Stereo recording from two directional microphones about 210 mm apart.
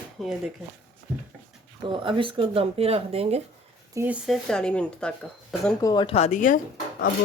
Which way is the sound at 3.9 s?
10° right (ahead or behind).